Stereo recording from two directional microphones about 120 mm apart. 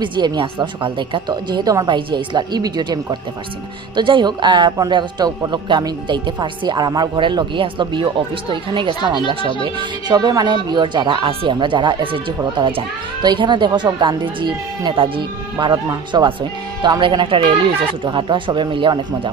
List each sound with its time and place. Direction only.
0.0 s speech: 40° right (ahead or behind)